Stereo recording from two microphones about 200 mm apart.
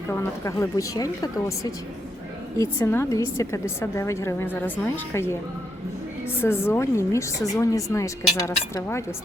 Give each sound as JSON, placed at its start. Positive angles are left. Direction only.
{"t": 0.1, "sound": "a woman's voice", "side_deg": 15}
{"t": 6.4, "sound": "a woman's voice", "side_deg": 10}